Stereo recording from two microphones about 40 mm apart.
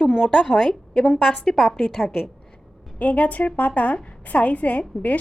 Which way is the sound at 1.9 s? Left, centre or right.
Centre.